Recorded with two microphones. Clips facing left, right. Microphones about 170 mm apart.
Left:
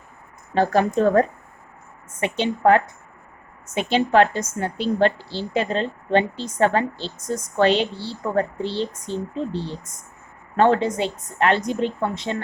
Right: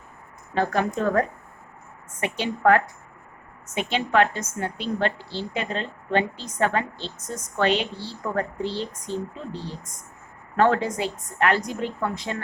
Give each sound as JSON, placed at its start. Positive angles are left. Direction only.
{"t": 0.5, "sound": "a woman's voice", "side_deg": 30}